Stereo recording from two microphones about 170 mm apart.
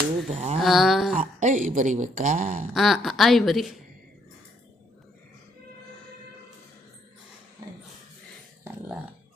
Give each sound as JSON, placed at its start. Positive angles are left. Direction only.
{"t": 0.3, "sound": "speech", "side_deg": -40}
{"t": 0.6, "sound": "a woman's voice", "side_deg": 0}
{"t": 1.2, "sound": "a woman's voice", "side_deg": -45}
{"t": 2.7, "sound": "a woman's voice", "side_deg": 0}